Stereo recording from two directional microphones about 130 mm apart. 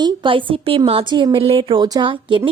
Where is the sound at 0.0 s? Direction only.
40° right (ahead or behind).